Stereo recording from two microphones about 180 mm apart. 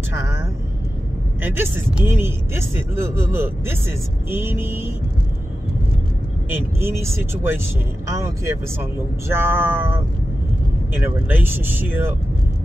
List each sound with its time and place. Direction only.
1.4 s speech: 10° right (ahead or behind)
6.5 s speech: 15° right (ahead or behind)